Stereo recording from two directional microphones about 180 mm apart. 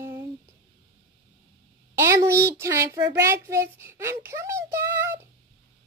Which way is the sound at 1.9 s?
15° right (ahead or behind).